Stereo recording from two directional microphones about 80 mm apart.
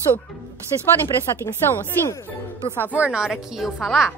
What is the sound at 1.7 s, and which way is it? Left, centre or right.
Speech, left.